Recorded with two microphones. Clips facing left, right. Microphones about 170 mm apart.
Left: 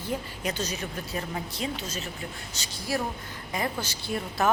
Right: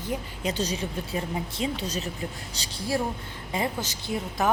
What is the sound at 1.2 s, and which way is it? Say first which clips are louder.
Speech: right 3 dB; 20° right (ahead or behind).